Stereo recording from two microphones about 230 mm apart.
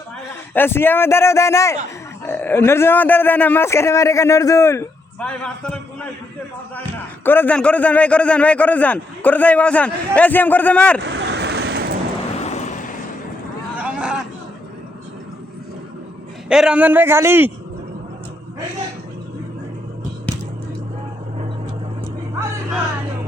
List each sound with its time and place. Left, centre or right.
0.5 s speech: centre
7.3 s speech: centre
11.0 s vehicle: right
12.4 s vehicle: left
13.7 s a sound: centre
16.5 s a man's voice: centre